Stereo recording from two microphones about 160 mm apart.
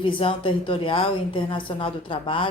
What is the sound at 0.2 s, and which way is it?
A woman's voice, 35° left (ahead or behind).